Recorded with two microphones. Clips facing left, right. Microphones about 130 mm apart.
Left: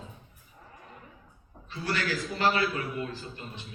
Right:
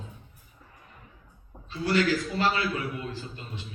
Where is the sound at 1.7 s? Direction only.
20° right (ahead or behind).